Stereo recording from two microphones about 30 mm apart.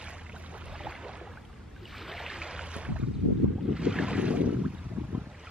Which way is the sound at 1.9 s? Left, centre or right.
Centre.